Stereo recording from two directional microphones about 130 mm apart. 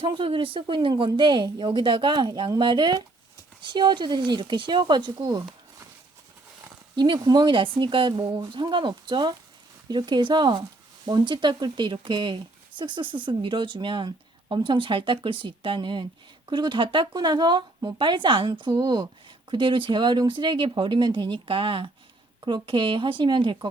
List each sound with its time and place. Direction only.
0.0 s speech: 40° right (ahead or behind)
6.9 s speech: 35° right (ahead or behind)